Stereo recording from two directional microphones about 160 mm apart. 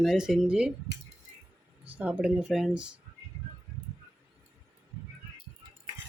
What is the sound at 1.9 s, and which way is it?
Speech, 10° right (ahead or behind).